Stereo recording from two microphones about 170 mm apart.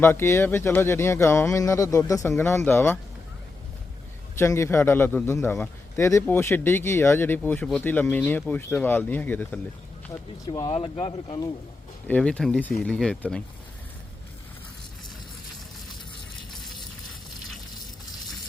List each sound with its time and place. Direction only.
0.0 s a man's voice: 15° left (ahead or behind)
4.4 s a man's voice: 15° left (ahead or behind)
10.1 s speech: 20° left (ahead or behind)
10.7 s speech: 35° left (ahead or behind)
12.0 s a man's voice: 5° left (ahead or behind)